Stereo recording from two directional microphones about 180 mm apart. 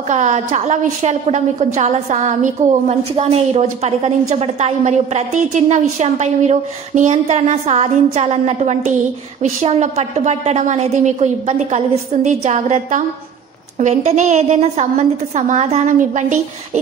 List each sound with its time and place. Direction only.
0.1 s a woman's voice: 40° right (ahead or behind)